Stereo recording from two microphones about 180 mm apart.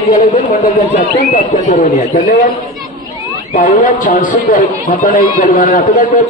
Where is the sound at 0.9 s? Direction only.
45° left (ahead or behind).